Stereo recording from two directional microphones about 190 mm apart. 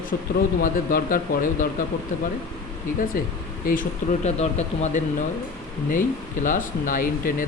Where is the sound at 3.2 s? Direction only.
50° left (ahead or behind).